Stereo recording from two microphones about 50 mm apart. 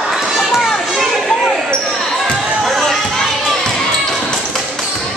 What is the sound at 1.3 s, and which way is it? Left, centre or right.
Basketball bounce, centre.